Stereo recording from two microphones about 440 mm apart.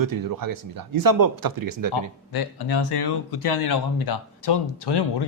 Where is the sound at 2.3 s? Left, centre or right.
Left.